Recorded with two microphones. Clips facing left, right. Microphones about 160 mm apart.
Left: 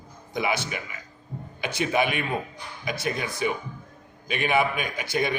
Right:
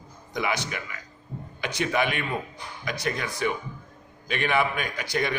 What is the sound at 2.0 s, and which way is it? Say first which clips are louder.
Speech: left 1 dB; 15° left (ahead or behind).